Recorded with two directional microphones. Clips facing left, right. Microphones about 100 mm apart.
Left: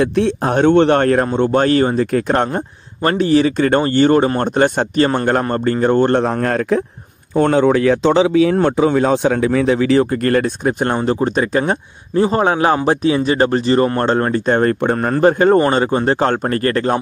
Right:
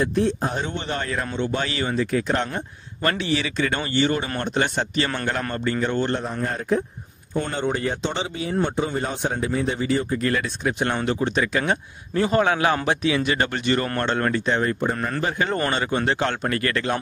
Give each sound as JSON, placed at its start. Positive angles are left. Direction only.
{"t": 0.0, "sound": "speech", "side_deg": 75}
{"t": 3.0, "sound": "speech", "side_deg": 40}
{"t": 6.2, "sound": "speech", "side_deg": 90}
{"t": 10.2, "sound": "a man's voice", "side_deg": 50}
{"t": 14.5, "sound": "speech", "side_deg": 65}
{"t": 15.0, "sound": "a man's voice", "side_deg": 45}